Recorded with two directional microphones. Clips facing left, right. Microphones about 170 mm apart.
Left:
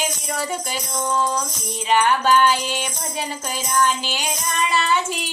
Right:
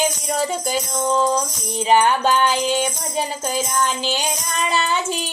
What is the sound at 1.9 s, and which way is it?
Music, 20° right (ahead or behind).